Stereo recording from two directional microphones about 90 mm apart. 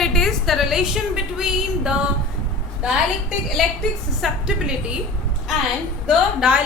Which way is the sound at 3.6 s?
Centre (ahead or behind).